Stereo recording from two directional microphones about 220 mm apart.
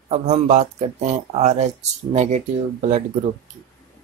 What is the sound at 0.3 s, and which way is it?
Speech, 30° right (ahead or behind).